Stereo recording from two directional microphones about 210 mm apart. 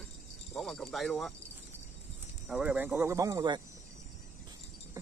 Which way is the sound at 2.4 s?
5° right (ahead or behind).